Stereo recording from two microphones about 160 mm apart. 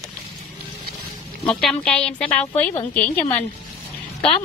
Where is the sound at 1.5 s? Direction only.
5° left (ahead or behind).